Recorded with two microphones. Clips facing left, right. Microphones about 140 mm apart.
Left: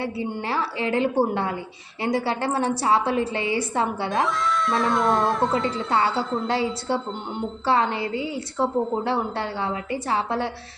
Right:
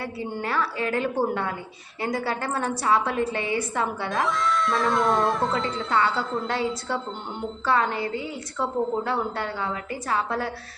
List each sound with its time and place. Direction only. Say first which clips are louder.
0.0 s a woman's voice: left 3 dB; 25° left (ahead or behind)
4.1 s speech: left 1 dB; centre (ahead or behind)
5.9 s a woman's voice: left 1 dB; 30° left (ahead or behind)
7.6 s a woman's voice: left 1 dB; 25° left (ahead or behind)